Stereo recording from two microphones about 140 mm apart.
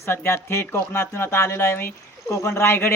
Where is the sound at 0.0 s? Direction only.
20° left (ahead or behind).